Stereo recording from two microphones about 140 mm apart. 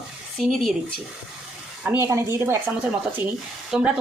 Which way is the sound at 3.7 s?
5° right (ahead or behind).